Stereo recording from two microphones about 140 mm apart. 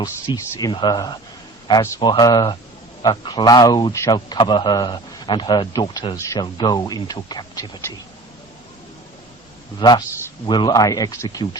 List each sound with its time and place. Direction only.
0.0 s a man's voice: 25° left (ahead or behind)
9.7 s a man's voice: 30° left (ahead or behind)